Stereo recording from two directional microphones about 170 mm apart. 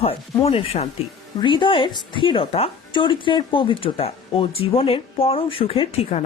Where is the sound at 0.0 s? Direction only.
35° left (ahead or behind).